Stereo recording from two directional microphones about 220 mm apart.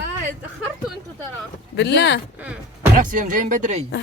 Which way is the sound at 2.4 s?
5° right (ahead or behind).